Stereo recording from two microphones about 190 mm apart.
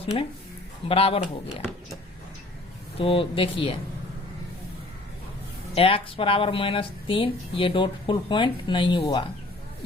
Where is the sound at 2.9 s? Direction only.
30° left (ahead or behind).